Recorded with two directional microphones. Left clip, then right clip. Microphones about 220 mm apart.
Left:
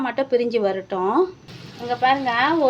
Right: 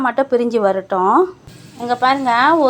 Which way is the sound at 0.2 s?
15° right (ahead or behind).